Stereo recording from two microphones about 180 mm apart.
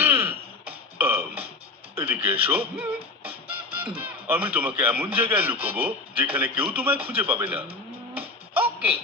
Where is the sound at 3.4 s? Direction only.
10° right (ahead or behind).